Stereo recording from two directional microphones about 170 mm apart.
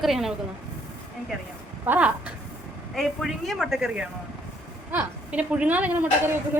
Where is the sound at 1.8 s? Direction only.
10° right (ahead or behind).